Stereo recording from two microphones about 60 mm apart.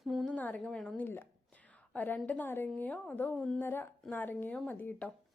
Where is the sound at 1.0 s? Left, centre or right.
Left.